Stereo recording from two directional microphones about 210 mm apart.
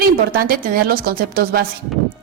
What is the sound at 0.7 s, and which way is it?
Speech, 45° right (ahead or behind).